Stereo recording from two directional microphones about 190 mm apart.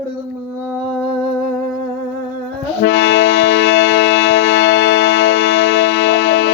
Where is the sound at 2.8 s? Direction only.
70° left (ahead or behind).